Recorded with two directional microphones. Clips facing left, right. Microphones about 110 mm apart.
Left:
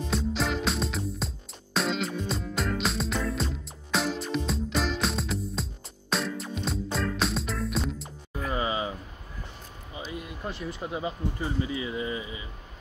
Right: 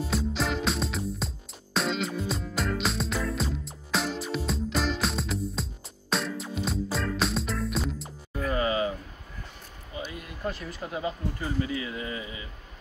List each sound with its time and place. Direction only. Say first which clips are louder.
0.0 s music: even; centre (ahead or behind)
8.4 s music: right 2 dB; 20° left (ahead or behind)
10.4 s speech: right 3 dB; 20° left (ahead or behind)